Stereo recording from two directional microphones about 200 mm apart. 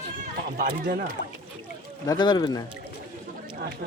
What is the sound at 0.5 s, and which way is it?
Speech, 45° right (ahead or behind).